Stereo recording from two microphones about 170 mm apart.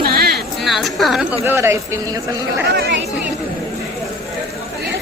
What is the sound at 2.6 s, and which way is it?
Speech, 85° right.